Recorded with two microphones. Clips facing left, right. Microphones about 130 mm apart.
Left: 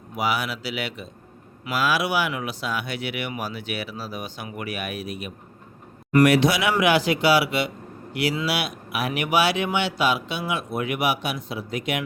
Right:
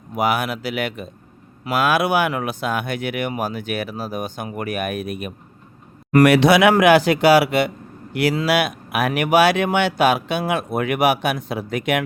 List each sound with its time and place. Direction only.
0.2 s speech: 55° right (ahead or behind)